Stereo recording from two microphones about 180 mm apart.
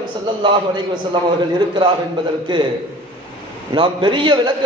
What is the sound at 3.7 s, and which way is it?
Speech, 25° right (ahead or behind).